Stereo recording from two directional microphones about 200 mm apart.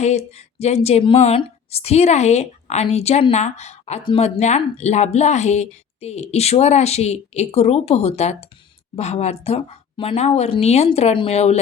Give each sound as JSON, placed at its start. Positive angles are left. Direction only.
{"t": 0.0, "sound": "a woman's voice", "side_deg": 35}